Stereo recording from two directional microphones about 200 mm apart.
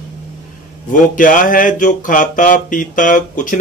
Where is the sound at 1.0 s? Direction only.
40° left (ahead or behind).